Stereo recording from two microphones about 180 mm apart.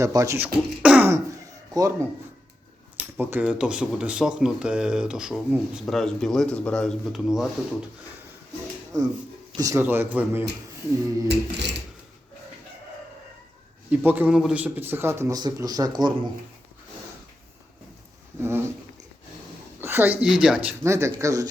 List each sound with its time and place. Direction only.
0.0 s speech: 20° right (ahead or behind); by 7.9 s 5° right (ahead or behind)
9.6 s speech: 15° right (ahead or behind)
11.3 s a sound: 70° right (ahead or behind)
13.9 s speech: 10° right (ahead or behind)
18.3 s speech: 15° right (ahead or behind)
19.8 s speech: 10° right (ahead or behind)